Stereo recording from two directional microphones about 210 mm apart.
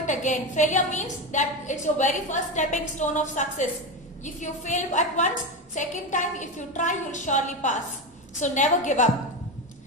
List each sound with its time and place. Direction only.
0.0 s a woman's voice: 35° left (ahead or behind)